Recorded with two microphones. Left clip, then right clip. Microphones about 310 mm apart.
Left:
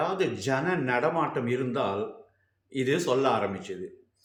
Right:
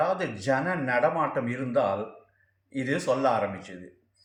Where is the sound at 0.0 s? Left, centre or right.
Centre.